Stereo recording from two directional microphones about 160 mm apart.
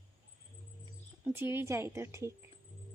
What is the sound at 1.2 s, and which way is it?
Speech, 15° right (ahead or behind).